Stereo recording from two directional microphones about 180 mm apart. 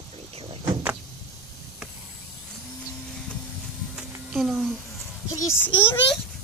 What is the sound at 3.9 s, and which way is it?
Music, centre (ahead or behind).